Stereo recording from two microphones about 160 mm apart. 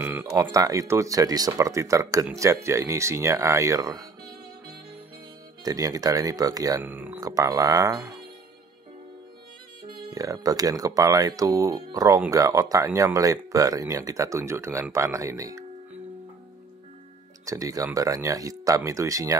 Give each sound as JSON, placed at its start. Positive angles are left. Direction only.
{"t": 0.0, "sound": "speech", "side_deg": -15}
{"t": 5.6, "sound": "speech", "side_deg": -25}
{"t": 6.8, "sound": "speech", "side_deg": -10}
{"t": 7.2, "sound": "speech", "side_deg": -20}
{"t": 10.0, "sound": "speech", "side_deg": -20}
{"t": 17.5, "sound": "speech", "side_deg": -20}